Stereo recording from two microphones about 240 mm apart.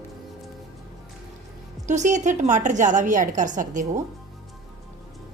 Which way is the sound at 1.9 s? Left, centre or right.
Right.